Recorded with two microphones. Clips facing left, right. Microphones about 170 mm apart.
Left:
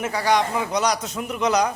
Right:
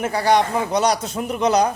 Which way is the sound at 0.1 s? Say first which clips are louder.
Right 3 dB; 30° right (ahead or behind).